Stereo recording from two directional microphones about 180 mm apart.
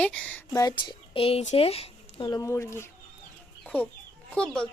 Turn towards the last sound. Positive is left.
turn(degrees=5)  # may be behind; listen again after turning